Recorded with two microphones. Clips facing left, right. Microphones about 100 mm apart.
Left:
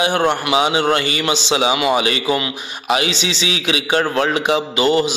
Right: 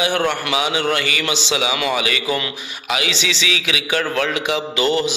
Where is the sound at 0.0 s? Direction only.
35° left (ahead or behind).